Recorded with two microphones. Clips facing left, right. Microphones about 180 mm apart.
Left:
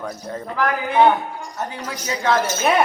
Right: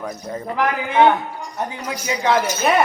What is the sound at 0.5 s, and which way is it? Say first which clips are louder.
A woman's voice: even; 20° right (ahead or behind).